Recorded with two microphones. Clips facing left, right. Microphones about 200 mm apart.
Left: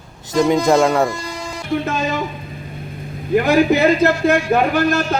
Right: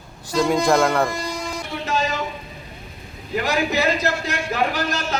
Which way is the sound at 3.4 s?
55° left (ahead or behind).